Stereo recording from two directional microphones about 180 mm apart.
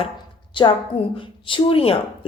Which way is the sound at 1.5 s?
30° left (ahead or behind).